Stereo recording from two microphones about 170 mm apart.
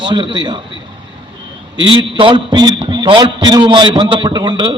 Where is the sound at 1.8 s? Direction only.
30° right (ahead or behind).